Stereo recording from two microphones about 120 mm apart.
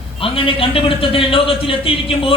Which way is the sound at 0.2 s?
50° left (ahead or behind).